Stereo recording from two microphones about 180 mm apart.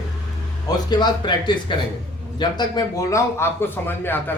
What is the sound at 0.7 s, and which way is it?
Speech, 25° left (ahead or behind).